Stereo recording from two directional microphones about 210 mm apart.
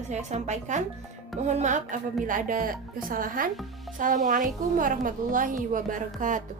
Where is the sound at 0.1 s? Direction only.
35° right (ahead or behind).